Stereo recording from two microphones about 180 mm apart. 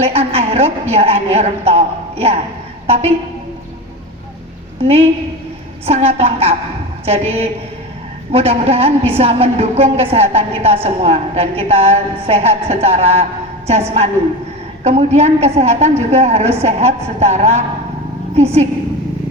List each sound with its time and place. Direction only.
0.0 s a woman's voice: 35° right (ahead or behind)
5.8 s a woman's voice: 35° right (ahead or behind)